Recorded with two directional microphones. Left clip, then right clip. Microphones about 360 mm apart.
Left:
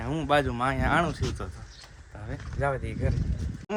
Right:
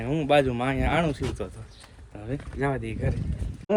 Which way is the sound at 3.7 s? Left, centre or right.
Centre.